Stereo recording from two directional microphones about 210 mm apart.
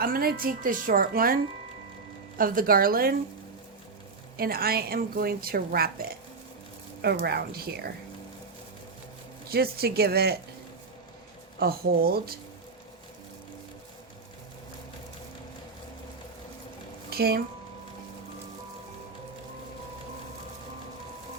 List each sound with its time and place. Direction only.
0.0 s a woman's voice: 45° right (ahead or behind)
2.4 s a woman's voice: 40° right (ahead or behind)
4.4 s a woman's voice: 45° right (ahead or behind)
9.5 s a woman's voice: 50° right (ahead or behind)
11.6 s a woman's voice: 45° right (ahead or behind)
17.1 s speech: 45° right (ahead or behind)